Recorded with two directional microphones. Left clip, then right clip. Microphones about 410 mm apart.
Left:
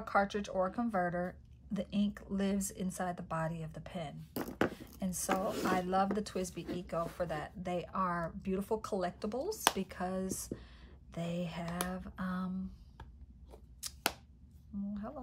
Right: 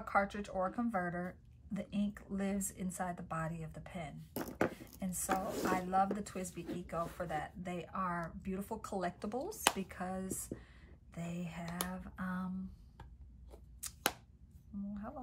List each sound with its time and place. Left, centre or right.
0.0 s speech: centre
13.5 s scissors: centre
14.7 s a woman's voice: centre